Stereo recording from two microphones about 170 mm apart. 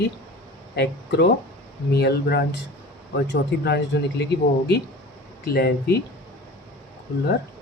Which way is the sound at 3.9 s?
90° left.